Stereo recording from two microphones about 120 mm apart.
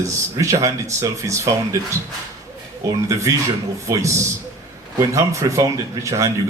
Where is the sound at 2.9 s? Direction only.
25° right (ahead or behind).